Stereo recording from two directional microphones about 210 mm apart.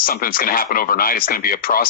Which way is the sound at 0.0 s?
45° left (ahead or behind).